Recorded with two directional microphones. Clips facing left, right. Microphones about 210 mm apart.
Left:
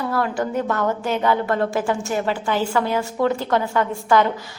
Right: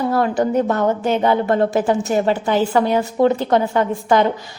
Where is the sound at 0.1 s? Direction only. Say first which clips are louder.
Right 5 dB; 20° right (ahead or behind).